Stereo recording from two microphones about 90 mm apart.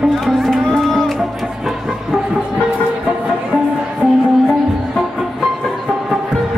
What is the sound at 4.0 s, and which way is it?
Music, centre (ahead or behind).